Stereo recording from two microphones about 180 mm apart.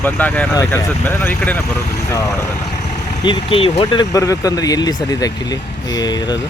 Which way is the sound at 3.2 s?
30° left (ahead or behind).